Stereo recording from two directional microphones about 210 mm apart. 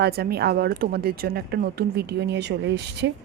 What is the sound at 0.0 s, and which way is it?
A woman's voice, 50° right (ahead or behind).